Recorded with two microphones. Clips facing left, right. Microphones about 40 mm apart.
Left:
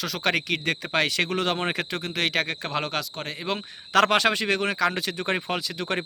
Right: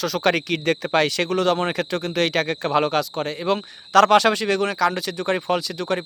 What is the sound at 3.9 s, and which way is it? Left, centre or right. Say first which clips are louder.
Speech: right 5 dB; left.